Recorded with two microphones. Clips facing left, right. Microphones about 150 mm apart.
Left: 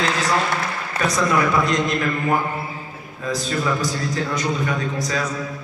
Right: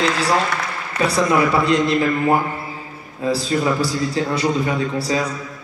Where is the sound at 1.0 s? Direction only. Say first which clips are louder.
Right 3 dB; 30° right (ahead or behind).